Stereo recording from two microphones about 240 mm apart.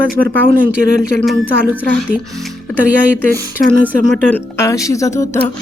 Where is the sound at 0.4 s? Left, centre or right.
Right.